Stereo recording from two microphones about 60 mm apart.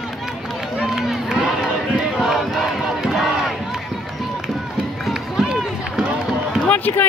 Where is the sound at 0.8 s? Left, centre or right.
Centre.